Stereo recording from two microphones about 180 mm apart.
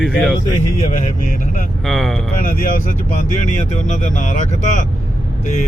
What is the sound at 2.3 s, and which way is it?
Speech, 50° left (ahead or behind).